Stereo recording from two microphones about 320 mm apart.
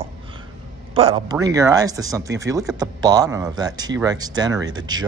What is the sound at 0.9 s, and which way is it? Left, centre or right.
Speech, centre.